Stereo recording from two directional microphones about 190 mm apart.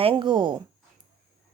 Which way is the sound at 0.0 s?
25° right (ahead or behind).